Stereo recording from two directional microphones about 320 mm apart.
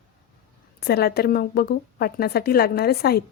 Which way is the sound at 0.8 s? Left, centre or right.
Left.